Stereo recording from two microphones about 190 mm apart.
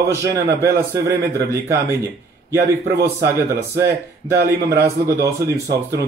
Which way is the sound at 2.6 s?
60° right (ahead or behind).